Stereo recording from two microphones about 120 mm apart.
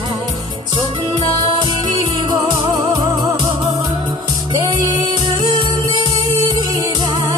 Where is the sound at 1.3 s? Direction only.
40° right (ahead or behind).